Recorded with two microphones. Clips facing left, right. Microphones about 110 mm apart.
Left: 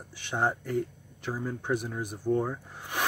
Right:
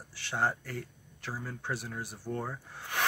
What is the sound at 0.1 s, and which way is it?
Speech, 15° left (ahead or behind).